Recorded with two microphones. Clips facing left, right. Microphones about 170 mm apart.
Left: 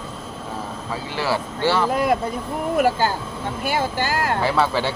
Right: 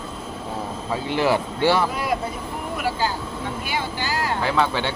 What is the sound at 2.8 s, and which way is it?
Speech, 45° left (ahead or behind).